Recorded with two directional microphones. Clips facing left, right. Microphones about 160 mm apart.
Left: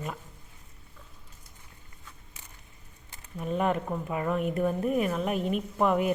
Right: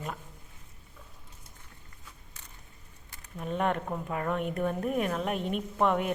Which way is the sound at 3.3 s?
Centre (ahead or behind).